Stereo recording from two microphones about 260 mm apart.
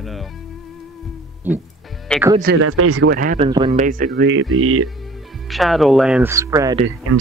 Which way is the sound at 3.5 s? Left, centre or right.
Centre.